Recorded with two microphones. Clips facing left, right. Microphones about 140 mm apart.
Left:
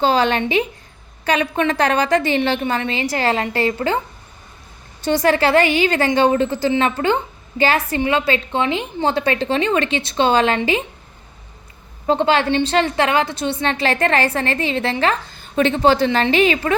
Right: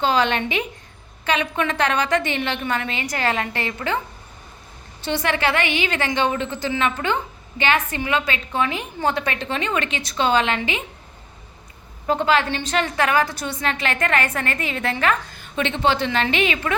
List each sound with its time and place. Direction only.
0.0 s a woman's voice: 35° left (ahead or behind)
5.0 s a woman's voice: 40° left (ahead or behind)
12.0 s a woman's voice: 30° left (ahead or behind)